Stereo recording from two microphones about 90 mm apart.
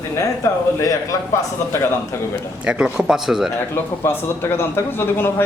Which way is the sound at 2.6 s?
10° right (ahead or behind).